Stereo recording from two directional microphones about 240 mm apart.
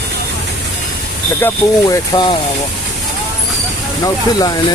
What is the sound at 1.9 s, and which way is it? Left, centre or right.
Speech, centre.